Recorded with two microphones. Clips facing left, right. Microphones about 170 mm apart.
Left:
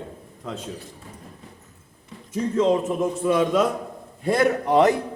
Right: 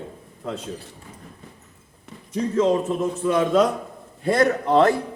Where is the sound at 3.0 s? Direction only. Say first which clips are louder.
Even; 10° left (ahead or behind).